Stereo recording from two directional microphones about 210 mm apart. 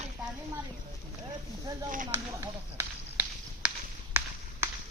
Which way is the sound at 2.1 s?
15° right (ahead or behind).